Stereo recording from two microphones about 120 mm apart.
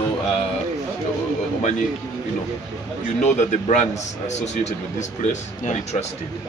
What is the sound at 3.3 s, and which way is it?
Speech, 85° left.